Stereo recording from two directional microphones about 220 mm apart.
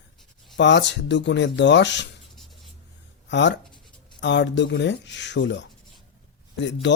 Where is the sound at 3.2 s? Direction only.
55° left (ahead or behind).